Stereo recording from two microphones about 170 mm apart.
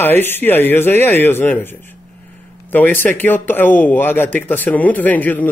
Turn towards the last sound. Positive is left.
turn(degrees=10)  # may be behind; listen again after turning